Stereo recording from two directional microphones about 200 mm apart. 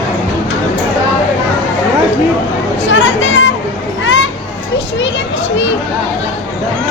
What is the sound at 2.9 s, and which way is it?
Children playing, 70° left (ahead or behind).